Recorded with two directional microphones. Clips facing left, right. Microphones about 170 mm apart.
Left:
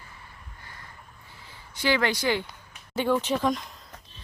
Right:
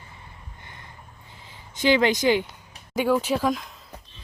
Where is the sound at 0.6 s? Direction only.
20° right (ahead or behind).